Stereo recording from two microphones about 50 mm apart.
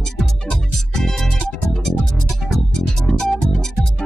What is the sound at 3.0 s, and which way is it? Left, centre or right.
Music, centre.